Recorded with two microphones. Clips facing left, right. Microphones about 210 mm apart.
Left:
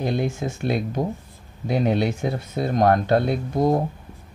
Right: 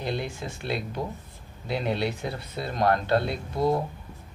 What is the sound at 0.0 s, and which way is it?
Speech, 50° left (ahead or behind).